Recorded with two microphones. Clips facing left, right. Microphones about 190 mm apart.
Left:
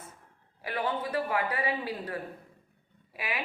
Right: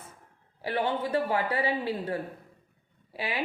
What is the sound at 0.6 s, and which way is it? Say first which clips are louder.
A man's voice: right 3 dB; 30° right (ahead or behind).